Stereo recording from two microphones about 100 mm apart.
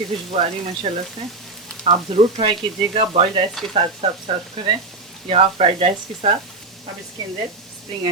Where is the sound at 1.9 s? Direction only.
85° right.